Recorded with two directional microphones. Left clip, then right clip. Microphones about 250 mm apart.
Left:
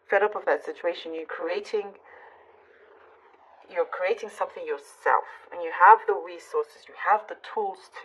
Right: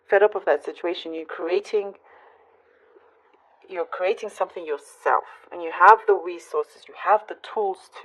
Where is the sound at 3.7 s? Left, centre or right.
Right.